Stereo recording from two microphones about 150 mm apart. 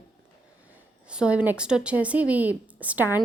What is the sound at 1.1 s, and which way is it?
A woman's voice, 5° right (ahead or behind).